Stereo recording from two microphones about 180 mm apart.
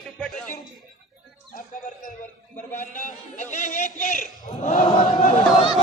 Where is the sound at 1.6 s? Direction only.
50° left (ahead or behind).